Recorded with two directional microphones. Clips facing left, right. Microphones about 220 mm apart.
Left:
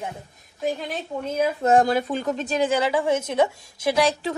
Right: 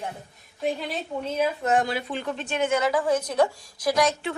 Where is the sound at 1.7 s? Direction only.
45° left (ahead or behind).